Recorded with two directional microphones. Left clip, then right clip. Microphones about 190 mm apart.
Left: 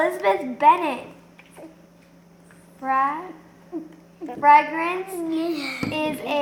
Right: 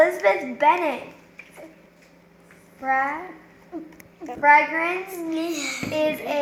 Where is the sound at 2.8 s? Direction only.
15° right (ahead or behind).